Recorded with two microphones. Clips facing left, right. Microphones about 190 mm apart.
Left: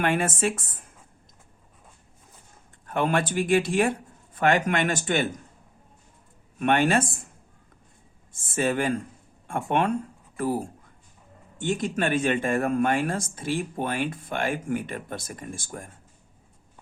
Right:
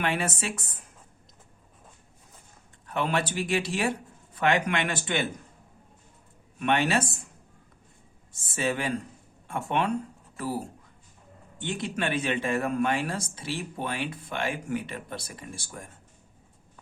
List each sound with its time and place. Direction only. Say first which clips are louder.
0.0 s speech: left 5 dB; 50° left (ahead or behind)
2.8 s speech: left 3 dB; 50° left (ahead or behind)
6.6 s speech: left 3 dB; 50° left (ahead or behind)
8.3 s speech: left 4 dB; 50° left (ahead or behind)
11.5 s speech: left 5 dB; 45° left (ahead or behind)